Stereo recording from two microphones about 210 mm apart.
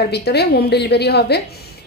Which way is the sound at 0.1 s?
50° left (ahead or behind).